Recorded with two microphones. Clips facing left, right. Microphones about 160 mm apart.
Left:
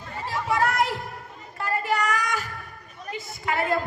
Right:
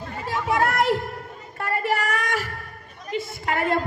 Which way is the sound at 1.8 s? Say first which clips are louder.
Right 1 dB; 55° right (ahead or behind).